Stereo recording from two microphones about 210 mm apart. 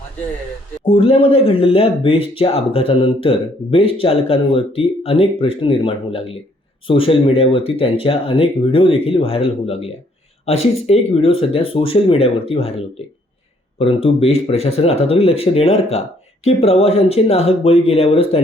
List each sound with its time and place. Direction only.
0.9 s speech: 25° left (ahead or behind)
13.7 s speech: 25° left (ahead or behind)